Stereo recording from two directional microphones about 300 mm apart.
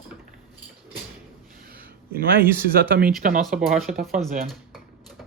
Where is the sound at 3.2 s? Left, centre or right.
Right.